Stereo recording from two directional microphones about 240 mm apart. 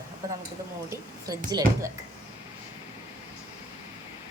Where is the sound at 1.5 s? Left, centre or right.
Centre.